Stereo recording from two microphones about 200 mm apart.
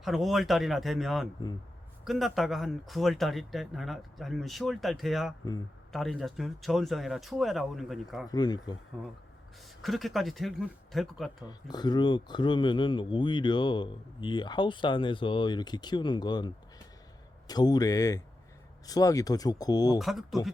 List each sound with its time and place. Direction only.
0.0 s speech: centre (ahead or behind)
8.3 s speech: 20° left (ahead or behind)
9.8 s speech: centre (ahead or behind)
11.4 s speech: 20° left (ahead or behind)
17.5 s speech: 20° left (ahead or behind)
20.0 s speech: centre (ahead or behind)